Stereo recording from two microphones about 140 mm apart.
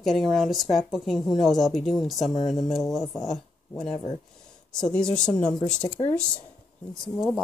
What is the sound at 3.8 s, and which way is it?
Speech, 35° left (ahead or behind).